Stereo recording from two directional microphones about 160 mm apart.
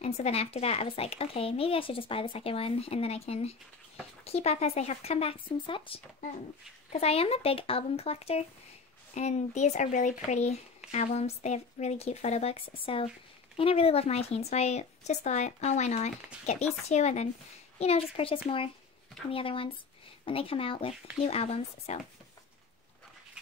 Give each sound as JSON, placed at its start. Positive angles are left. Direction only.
{"t": 0.0, "sound": "a woman's voice", "side_deg": 40}